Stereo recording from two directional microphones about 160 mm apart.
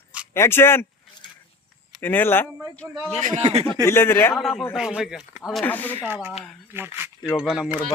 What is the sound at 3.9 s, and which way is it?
Speech, 15° left (ahead or behind).